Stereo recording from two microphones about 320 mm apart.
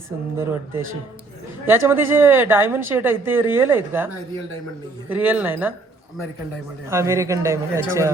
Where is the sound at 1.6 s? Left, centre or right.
Centre.